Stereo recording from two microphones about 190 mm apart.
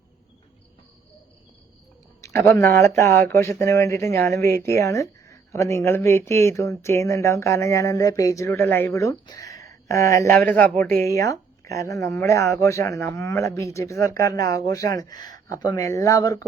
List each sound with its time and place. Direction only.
2.2 s speech: 15° left (ahead or behind)